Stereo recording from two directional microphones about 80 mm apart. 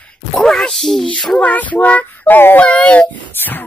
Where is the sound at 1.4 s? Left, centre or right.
Centre.